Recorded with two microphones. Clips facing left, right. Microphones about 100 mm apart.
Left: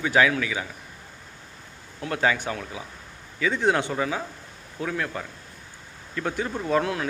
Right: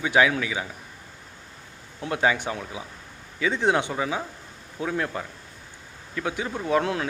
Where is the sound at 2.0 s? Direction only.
20° right (ahead or behind).